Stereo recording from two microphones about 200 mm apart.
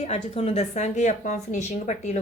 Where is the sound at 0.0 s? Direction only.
30° left (ahead or behind).